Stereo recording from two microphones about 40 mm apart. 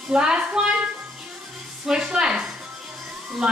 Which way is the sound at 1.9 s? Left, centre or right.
Centre.